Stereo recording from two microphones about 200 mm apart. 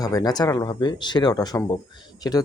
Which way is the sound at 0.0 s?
20° left (ahead or behind).